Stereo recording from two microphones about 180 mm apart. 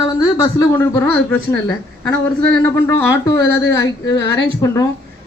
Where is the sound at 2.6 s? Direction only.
15° left (ahead or behind).